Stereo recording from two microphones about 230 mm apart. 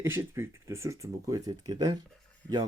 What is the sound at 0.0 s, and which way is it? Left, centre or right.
A man's voice, centre.